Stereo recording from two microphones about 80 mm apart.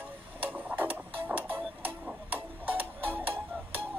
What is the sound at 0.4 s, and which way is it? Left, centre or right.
Music, right.